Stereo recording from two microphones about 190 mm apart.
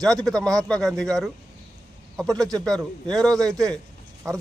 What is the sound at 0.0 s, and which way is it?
Speech, centre (ahead or behind).